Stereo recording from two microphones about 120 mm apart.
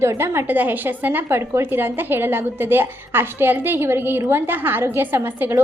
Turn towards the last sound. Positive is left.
turn(degrees=-15)  # may be behind; listen again after turning